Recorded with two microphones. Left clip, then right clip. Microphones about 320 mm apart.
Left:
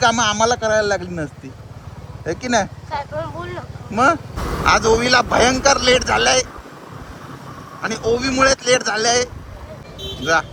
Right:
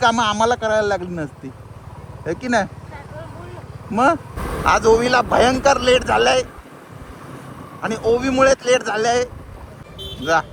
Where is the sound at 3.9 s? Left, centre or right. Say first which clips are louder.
Left 1 dB; centre.